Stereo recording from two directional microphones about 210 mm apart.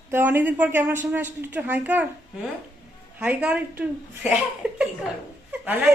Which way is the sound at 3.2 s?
5° right (ahead or behind).